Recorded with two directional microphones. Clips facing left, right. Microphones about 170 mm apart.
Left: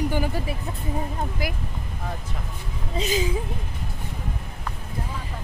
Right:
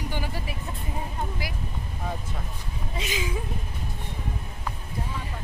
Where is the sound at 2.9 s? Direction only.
35° left (ahead or behind).